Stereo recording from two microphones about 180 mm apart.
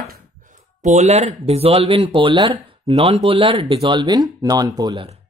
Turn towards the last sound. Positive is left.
turn(degrees=-20)  # may be behind; listen again after turning